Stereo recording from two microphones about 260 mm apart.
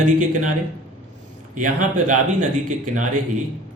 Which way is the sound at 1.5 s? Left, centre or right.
Right.